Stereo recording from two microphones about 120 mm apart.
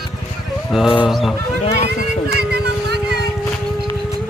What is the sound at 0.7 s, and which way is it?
Speech, 5° right (ahead or behind).